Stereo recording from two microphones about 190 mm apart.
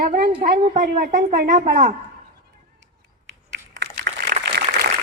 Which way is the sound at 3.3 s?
75° right (ahead or behind).